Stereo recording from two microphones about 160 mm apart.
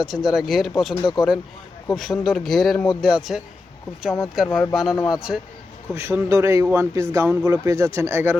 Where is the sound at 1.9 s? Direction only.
Centre (ahead or behind).